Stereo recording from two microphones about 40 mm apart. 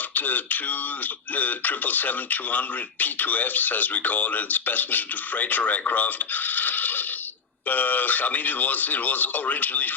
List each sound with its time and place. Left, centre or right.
0.1 s speech: left